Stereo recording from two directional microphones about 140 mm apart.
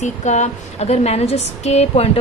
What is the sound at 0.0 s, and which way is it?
A woman's voice, 55° left (ahead or behind).